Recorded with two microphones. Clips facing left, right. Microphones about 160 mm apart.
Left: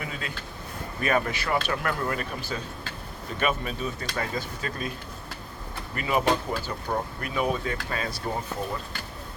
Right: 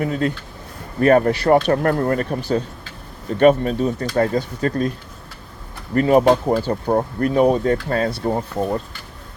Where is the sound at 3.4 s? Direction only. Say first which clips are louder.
Right 14 dB; 35° right (ahead or behind).